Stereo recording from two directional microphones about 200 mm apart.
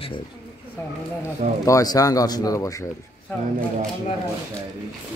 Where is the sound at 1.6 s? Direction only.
15° left (ahead or behind).